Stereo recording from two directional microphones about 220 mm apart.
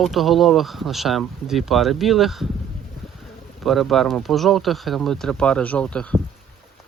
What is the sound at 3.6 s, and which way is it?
Speech, centre (ahead or behind).